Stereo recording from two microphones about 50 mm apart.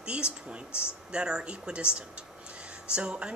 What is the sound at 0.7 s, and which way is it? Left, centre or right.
Speech, left.